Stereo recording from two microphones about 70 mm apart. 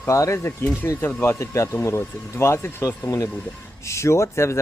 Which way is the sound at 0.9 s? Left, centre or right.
Left.